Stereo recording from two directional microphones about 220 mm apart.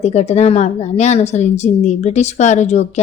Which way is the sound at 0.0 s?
30° left (ahead or behind).